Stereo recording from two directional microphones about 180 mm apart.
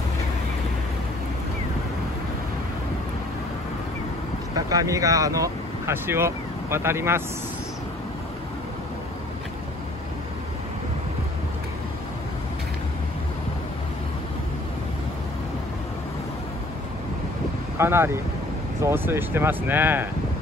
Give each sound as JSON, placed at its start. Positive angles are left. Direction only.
{"t": 4.6, "sound": "speech", "side_deg": -20}
{"t": 17.7, "sound": "speech", "side_deg": -15}